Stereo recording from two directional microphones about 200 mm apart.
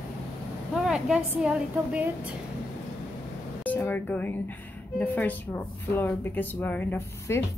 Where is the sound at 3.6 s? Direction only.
10° left (ahead or behind).